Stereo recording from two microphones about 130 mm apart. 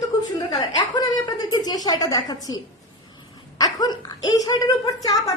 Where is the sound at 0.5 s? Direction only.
30° left (ahead or behind).